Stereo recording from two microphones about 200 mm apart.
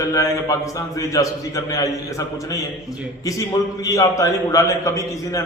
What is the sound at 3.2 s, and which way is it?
A man's voice, 15° left (ahead or behind).